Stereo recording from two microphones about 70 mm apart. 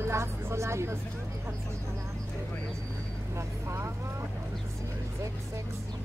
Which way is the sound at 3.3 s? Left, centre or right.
Right.